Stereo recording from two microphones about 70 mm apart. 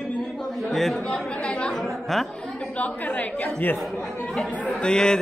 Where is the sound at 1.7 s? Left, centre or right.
Centre.